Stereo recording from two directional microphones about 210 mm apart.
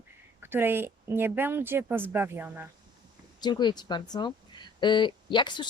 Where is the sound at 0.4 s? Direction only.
10° right (ahead or behind).